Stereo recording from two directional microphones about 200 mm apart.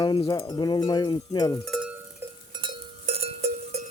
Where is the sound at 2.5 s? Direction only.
25° right (ahead or behind).